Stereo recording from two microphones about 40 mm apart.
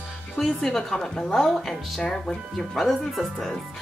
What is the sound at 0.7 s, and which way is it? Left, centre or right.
Speech, centre.